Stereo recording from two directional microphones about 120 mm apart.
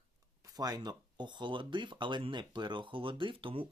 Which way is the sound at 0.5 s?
35° right (ahead or behind).